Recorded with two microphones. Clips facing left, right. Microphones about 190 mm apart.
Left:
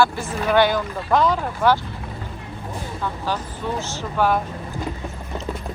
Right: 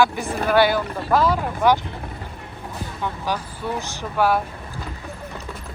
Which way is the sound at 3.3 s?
15° right (ahead or behind).